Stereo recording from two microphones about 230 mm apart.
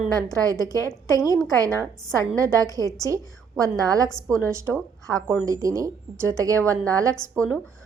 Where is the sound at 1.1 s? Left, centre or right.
Centre.